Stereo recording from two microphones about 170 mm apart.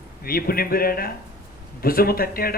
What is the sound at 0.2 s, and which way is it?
A man's voice, 60° left (ahead or behind).